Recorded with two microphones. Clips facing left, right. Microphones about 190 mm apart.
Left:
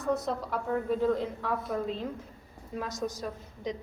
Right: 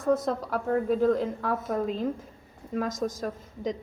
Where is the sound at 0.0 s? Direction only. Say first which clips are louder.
Right 5 dB; 90° right.